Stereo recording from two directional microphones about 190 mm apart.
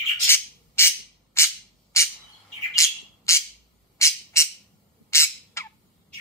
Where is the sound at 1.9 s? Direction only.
15° left (ahead or behind).